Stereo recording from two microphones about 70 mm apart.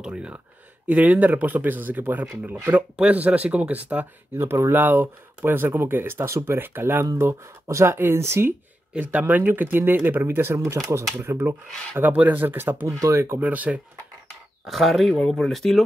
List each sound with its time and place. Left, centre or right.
0.0 s speech: centre
4.4 s speech: right
8.9 s speech: right
10.2 s speech: right
12.0 s speech: right
13.4 s speech: right
14.7 s speech: centre